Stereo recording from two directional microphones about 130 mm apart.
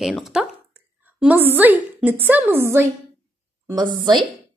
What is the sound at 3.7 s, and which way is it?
Speech, 35° right (ahead or behind).